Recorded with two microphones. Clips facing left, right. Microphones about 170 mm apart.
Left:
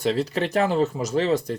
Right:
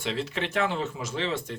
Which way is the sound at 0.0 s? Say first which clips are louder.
Left 7 dB; 40° left (ahead or behind).